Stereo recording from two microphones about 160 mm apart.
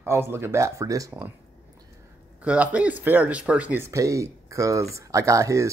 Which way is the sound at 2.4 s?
5° right (ahead or behind).